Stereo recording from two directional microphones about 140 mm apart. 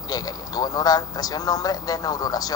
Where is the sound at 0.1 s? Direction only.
25° left (ahead or behind).